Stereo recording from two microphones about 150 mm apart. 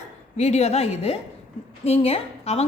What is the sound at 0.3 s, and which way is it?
A woman's voice, 45° left (ahead or behind).